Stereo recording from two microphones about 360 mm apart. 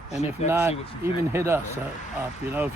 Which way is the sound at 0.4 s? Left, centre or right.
Centre.